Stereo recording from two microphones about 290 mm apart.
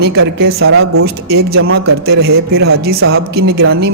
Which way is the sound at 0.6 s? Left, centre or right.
Right.